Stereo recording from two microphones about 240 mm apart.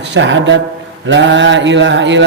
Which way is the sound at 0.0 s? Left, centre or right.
Right.